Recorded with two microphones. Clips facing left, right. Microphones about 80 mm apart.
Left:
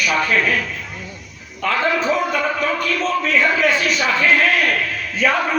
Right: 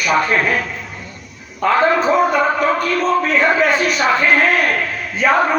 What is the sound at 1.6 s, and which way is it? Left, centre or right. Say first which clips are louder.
A man's voice: right 5 dB; right.